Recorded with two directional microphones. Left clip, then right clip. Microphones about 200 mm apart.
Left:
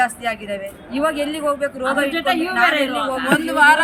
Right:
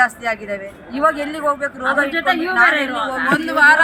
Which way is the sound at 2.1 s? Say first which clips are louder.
Right 3 dB; 30° left (ahead or behind).